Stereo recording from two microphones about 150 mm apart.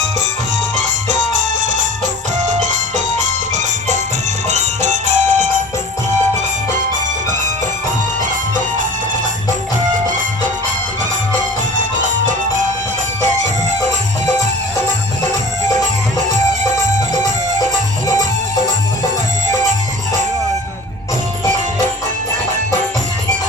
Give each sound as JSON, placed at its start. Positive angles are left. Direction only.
{"t": 0.8, "sound": "music", "side_deg": -55}